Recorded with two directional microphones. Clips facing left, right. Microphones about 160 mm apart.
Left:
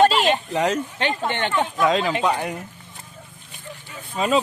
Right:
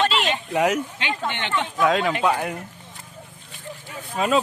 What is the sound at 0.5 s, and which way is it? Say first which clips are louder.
Speech: right 6 dB; 10° right (ahead or behind).